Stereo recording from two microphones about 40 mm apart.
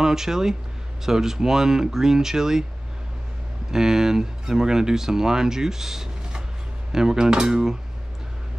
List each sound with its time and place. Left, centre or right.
0.0 s speech: centre
3.7 s speech: centre